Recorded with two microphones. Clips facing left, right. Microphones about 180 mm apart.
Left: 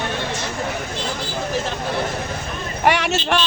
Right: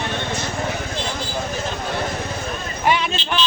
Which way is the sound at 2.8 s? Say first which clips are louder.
Left 2 dB; 75° left (ahead or behind).